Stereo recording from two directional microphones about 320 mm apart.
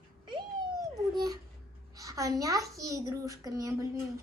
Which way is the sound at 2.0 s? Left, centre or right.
Centre.